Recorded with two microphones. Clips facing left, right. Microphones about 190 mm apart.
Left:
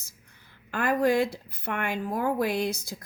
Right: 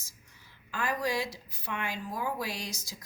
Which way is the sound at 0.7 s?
60° left (ahead or behind).